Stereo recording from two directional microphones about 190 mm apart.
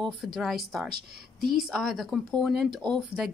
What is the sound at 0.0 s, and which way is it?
Speech, centre (ahead or behind).